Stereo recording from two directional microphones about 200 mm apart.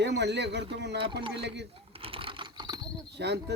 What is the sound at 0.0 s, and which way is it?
Speech, 60° right (ahead or behind).